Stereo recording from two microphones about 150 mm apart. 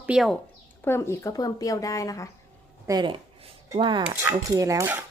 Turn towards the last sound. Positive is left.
turn(degrees=-20)  # may be behind; listen again after turning